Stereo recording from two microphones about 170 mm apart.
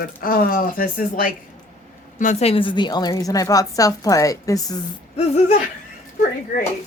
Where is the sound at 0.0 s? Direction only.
60° left (ahead or behind).